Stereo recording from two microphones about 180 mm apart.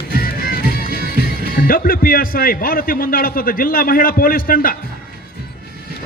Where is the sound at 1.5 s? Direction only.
55° left (ahead or behind).